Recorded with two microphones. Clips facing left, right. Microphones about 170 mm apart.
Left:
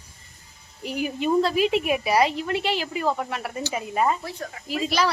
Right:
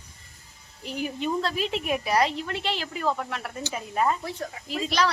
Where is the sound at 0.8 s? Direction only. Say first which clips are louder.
Left 4 dB; 10° left (ahead or behind).